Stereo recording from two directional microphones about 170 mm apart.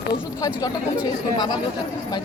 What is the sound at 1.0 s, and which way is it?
Speech, 25° left (ahead or behind).